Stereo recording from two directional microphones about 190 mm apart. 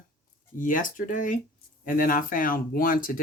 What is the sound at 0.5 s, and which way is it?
Speech, 45° left (ahead or behind).